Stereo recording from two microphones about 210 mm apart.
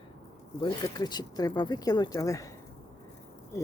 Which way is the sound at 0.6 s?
20° left (ahead or behind).